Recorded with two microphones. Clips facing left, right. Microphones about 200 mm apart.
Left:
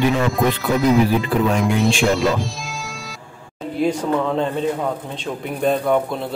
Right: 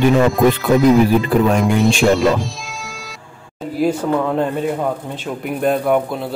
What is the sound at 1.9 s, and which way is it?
Speech, 45° right (ahead or behind).